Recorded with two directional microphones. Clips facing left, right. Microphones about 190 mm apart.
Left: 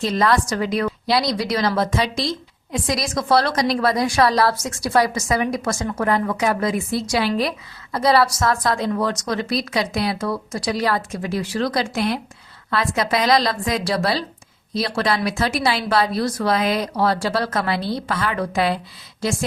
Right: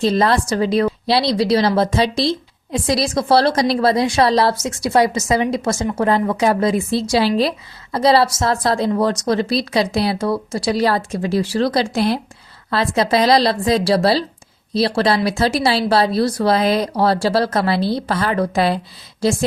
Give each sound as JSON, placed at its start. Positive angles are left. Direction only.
{"t": 0.0, "sound": "a woman's voice", "side_deg": -30}